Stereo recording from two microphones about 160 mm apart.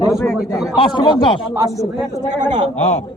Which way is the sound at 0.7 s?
30° left (ahead or behind).